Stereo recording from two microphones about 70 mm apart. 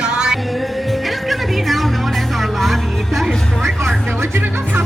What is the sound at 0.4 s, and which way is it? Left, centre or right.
Music, centre.